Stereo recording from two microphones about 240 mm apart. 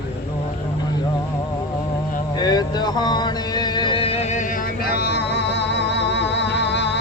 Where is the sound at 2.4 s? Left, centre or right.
Centre.